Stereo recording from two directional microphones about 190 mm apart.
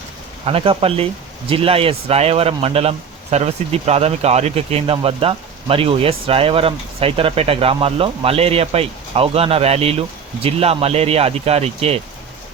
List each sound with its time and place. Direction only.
0.4 s speech: 30° right (ahead or behind)